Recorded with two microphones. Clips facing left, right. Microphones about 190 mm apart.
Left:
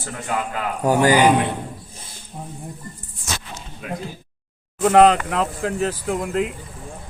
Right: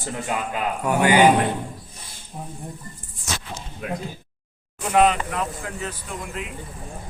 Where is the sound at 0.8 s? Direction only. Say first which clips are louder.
Left 3 dB; 40° left (ahead or behind).